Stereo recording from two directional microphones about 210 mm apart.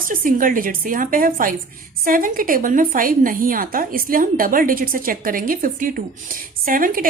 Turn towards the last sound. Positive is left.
turn(degrees=-40)  # may be behind; listen again after turning